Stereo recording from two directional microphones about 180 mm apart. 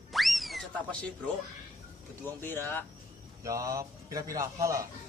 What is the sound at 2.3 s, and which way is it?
Speech, 10° left (ahead or behind).